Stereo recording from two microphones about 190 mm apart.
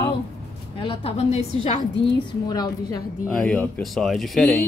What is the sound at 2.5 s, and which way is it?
Speech, 20° left (ahead or behind).